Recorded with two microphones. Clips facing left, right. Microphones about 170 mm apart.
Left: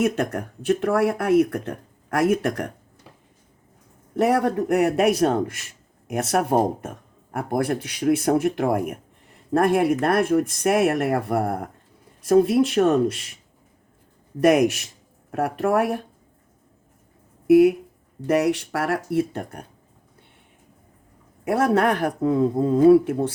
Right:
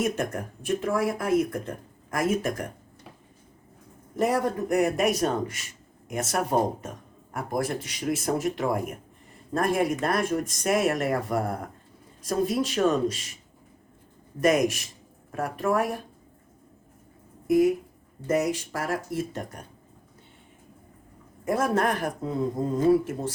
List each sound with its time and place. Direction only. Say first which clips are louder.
0.0 s a man's voice: left 5 dB; 65° left (ahead or behind)
4.1 s a man's voice: left 5 dB; 65° left (ahead or behind)
14.4 s a man's voice: left 5 dB; 60° left (ahead or behind)
17.4 s speech: left 7 dB; 65° left (ahead or behind)
21.4 s a man's voice: left 5 dB; 70° left (ahead or behind)